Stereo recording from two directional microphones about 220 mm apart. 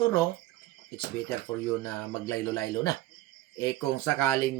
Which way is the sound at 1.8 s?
10° left (ahead or behind).